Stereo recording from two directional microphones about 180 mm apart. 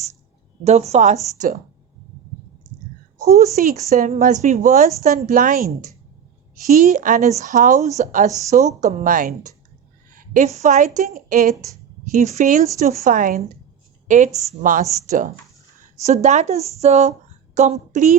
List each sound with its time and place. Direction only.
0.6 s speech: 35° right (ahead or behind)
3.5 s a woman's voice: 40° right (ahead or behind)
14.6 s speech: 45° right (ahead or behind)